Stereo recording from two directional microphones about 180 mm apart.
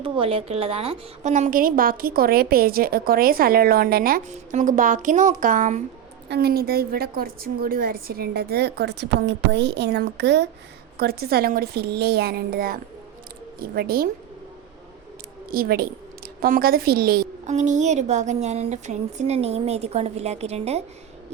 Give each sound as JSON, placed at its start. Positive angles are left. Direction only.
{"t": 0.0, "sound": "a woman's voice", "side_deg": -30}
{"t": 6.2, "sound": "a woman's voice", "side_deg": -65}
{"t": 10.9, "sound": "a woman's voice", "side_deg": -60}
{"t": 15.4, "sound": "a woman's voice", "side_deg": -55}
{"t": 17.4, "sound": "a woman's voice", "side_deg": -40}